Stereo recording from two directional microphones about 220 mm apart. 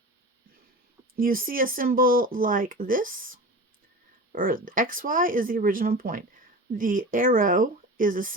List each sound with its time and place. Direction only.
1.1 s speech: 40° right (ahead or behind)
4.3 s speech: 40° right (ahead or behind)